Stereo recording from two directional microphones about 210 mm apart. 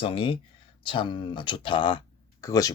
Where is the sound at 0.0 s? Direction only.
25° left (ahead or behind).